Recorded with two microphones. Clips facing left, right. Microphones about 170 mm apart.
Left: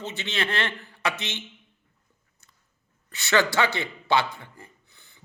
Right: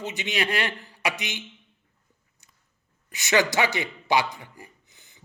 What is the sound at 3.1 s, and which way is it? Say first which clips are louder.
A man's voice: even; 15° right (ahead or behind).